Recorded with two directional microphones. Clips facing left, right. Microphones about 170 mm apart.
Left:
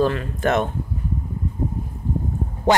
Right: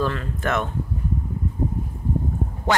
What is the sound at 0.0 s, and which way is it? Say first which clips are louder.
Speech: left 5 dB; 20° left (ahead or behind).